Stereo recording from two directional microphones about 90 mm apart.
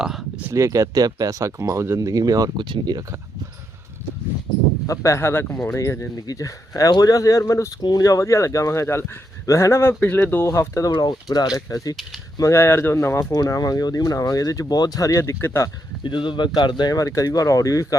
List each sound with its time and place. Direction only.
0.0 s speech: 5° right (ahead or behind)
0.5 s speech: 35° right (ahead or behind)
2.6 s speech: 55° right (ahead or behind)
4.9 s speech: 35° left (ahead or behind)
7.8 s speech: 50° left (ahead or behind); by 10.5 s 25° left (ahead or behind)
10.5 s speech: 35° left (ahead or behind)
10.9 s speech: 50° left (ahead or behind)
12.4 s speech: 30° left (ahead or behind)
13.3 s speech: 45° left (ahead or behind)
16.0 s speech: 60° left (ahead or behind); by 17.8 s 40° left (ahead or behind)